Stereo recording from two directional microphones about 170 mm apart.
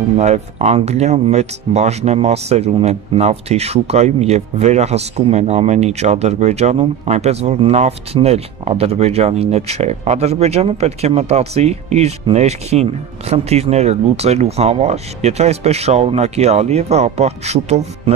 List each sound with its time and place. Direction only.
0.2 s speech: 40° right (ahead or behind)